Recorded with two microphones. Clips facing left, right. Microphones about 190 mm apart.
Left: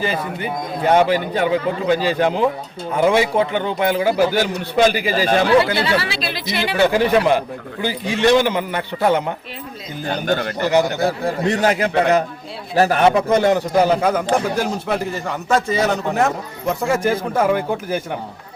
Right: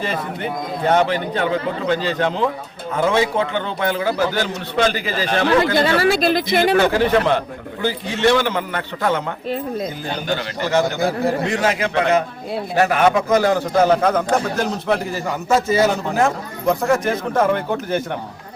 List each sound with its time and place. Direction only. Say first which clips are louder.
0.0 s a man's voice: left 1 dB; 5° left (ahead or behind)
5.7 s speech: right 4 dB; 45° right (ahead or behind)
6.8 s a man's voice: left 1 dB; 15° left (ahead or behind)
10.2 s a man's voice: left 4 dB; 50° left (ahead or behind)
10.6 s a man's voice: left 2 dB; 15° left (ahead or behind)
11.6 s a man's voice: left 3 dB; 40° left (ahead or behind)
13.7 s a man's voice: right 1 dB; 10° left (ahead or behind)